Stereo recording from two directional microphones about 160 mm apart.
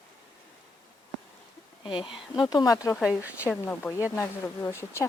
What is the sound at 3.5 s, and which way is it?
Speech, 10° left (ahead or behind).